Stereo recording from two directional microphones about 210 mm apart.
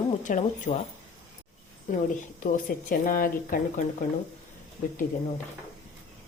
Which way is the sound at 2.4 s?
40° left (ahead or behind).